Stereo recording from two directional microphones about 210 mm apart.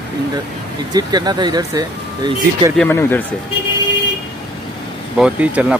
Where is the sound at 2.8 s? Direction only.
10° left (ahead or behind).